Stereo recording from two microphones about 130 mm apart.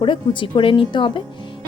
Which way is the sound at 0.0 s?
40° left (ahead or behind).